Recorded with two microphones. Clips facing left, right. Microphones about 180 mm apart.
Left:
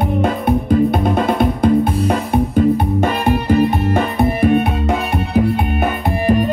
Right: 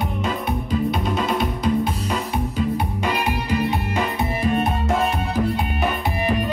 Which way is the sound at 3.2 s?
55° left (ahead or behind).